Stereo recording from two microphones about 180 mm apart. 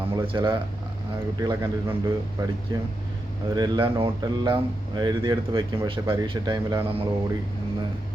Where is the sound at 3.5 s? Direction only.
25° right (ahead or behind).